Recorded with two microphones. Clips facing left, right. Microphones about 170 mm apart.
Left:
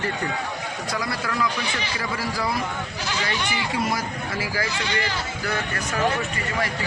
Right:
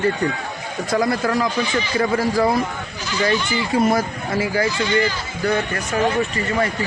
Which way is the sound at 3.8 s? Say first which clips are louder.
Right 10 dB; 50° right (ahead or behind).